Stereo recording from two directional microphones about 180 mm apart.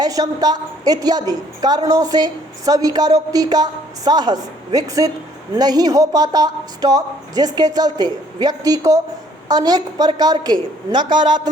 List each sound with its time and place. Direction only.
0.0 s a woman's voice: 20° right (ahead or behind)